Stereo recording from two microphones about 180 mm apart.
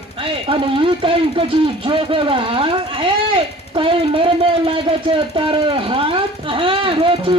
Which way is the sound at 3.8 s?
30° right (ahead or behind).